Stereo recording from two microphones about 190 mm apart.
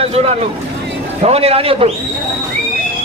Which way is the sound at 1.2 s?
30° right (ahead or behind).